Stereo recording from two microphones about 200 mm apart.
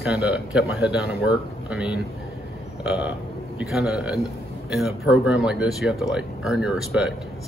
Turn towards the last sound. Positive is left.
turn(degrees=-5)  # may be behind; listen again after turning